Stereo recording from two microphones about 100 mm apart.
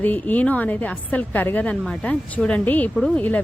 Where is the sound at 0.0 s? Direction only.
15° left (ahead or behind).